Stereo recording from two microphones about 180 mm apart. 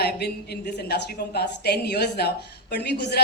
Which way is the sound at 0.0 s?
65° left (ahead or behind).